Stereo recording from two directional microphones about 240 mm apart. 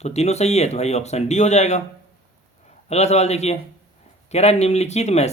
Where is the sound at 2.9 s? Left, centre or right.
Left.